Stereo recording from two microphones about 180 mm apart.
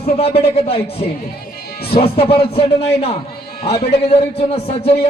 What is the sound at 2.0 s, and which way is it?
A man's voice, 30° left (ahead or behind).